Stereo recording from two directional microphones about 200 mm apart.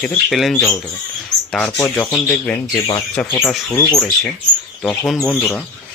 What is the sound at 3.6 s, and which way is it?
Speech, 15° left (ahead or behind).